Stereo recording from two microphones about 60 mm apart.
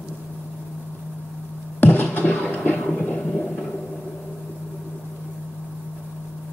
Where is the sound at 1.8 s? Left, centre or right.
Left.